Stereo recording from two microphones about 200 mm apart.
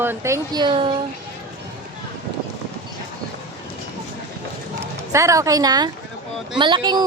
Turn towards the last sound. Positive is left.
turn(degrees=-20)  # may be behind; listen again after turning